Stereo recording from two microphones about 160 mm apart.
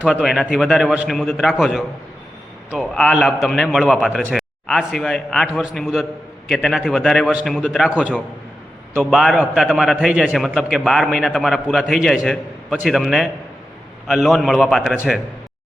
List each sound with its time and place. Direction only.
0.0 s a man's voice: 5° right (ahead or behind)